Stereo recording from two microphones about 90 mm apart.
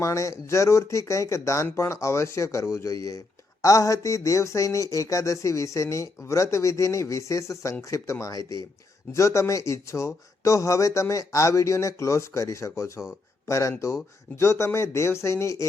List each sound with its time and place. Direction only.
0.0 s speech: 35° left (ahead or behind)
8.4 s speech: 60° right (ahead or behind)
9.1 s speech: 35° left (ahead or behind)